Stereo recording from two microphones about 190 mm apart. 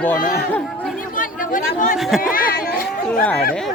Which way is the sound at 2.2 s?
50° left (ahead or behind).